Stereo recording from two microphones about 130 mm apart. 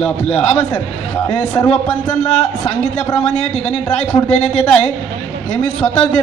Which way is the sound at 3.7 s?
10° left (ahead or behind).